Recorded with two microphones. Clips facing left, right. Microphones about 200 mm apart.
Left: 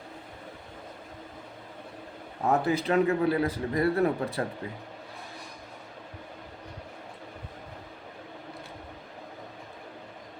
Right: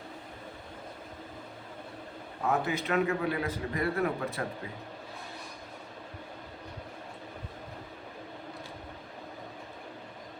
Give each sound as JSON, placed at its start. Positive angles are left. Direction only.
{"t": 2.5, "sound": "a man's voice", "side_deg": 35}